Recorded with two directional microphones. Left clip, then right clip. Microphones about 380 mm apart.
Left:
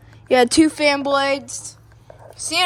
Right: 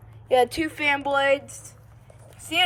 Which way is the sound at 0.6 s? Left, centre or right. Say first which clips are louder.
Left 13 dB; left.